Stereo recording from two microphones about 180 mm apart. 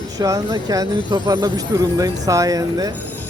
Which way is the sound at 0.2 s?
20° right (ahead or behind).